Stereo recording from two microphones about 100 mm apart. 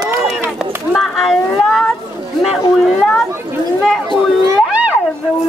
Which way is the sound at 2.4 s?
Centre (ahead or behind).